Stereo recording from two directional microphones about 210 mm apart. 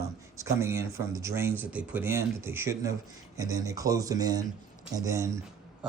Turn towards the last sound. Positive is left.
turn(degrees=-5)  # may be behind; listen again after turning